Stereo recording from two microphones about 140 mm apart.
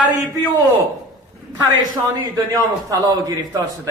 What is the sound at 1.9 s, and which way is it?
A man's voice, 25° right (ahead or behind).